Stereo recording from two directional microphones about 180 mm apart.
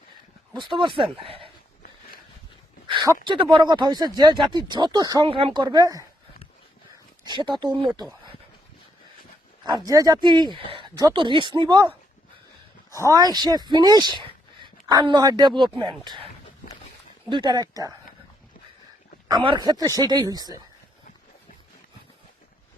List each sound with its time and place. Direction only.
0.5 s speech: 25° right (ahead or behind)
2.8 s a sound: 25° right (ahead or behind)
3.2 s speech: 25° right (ahead or behind)
5.6 s speech: 20° right (ahead or behind)
7.3 s speech: 25° right (ahead or behind)
9.6 s speech: 20° right (ahead or behind)
12.9 s speech: 20° right (ahead or behind)
19.3 s speech: 25° right (ahead or behind)